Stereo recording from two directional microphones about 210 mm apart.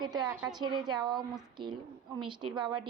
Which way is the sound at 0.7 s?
20° right (ahead or behind).